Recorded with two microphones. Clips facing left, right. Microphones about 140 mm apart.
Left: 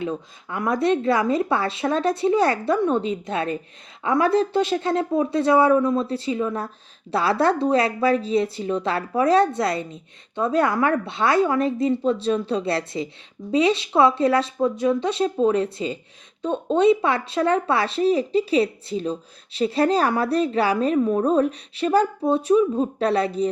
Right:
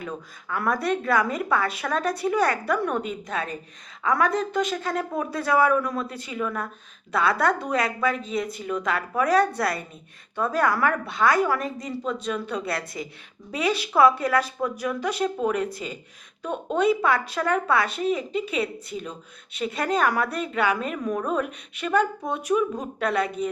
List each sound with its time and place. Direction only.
0.0 s a woman's voice: 25° left (ahead or behind)